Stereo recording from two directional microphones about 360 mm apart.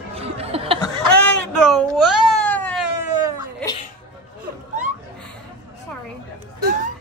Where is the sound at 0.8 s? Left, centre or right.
Centre.